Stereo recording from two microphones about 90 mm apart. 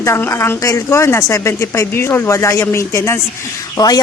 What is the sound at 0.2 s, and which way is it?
A woman's voice, 25° left (ahead or behind).